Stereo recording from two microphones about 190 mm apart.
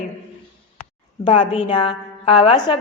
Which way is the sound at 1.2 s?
25° left (ahead or behind).